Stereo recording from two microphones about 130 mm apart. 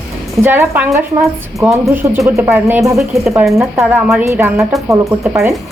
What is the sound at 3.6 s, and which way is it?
A woman's voice, 25° right (ahead or behind).